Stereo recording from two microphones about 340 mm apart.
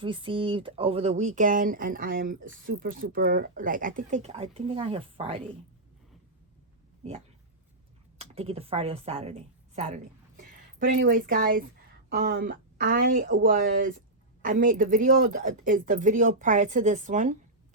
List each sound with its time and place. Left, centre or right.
0.0 s speech: centre
8.2 s speech: centre